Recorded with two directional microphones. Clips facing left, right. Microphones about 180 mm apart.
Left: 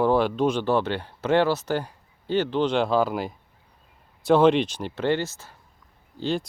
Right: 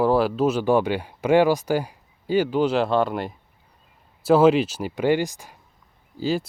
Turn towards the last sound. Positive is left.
turn(degrees=-5)  # may be behind; listen again after turning